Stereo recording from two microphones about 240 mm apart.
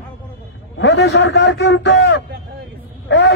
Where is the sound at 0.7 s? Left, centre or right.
Left.